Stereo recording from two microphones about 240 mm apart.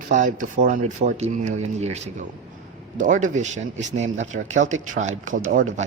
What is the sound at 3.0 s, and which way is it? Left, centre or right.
A man's voice, right.